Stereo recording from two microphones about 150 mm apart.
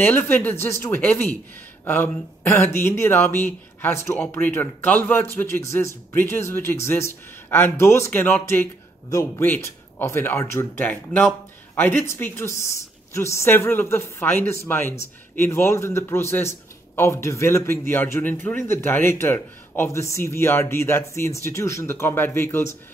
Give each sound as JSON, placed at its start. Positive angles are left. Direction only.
{"t": 0.0, "sound": "a man's voice", "side_deg": 15}